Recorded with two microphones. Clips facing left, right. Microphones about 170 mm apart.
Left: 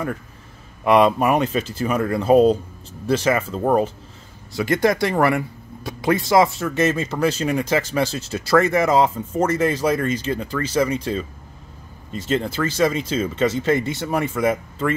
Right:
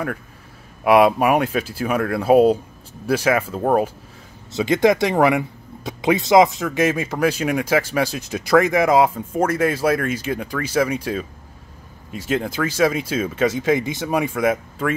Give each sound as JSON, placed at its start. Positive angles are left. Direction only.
{"t": 0.8, "sound": "speech", "side_deg": -10}
{"t": 4.5, "sound": "speech", "side_deg": -20}